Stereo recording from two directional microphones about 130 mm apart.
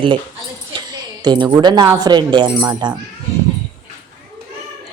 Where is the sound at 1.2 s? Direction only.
35° right (ahead or behind).